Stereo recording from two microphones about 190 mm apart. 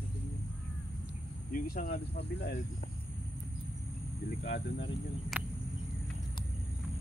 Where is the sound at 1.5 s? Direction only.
50° left (ahead or behind).